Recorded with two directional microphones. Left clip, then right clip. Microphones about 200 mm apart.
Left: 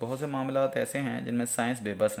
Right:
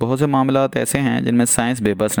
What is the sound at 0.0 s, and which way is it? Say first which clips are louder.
Speech: right 15 dB; 45° right (ahead or behind).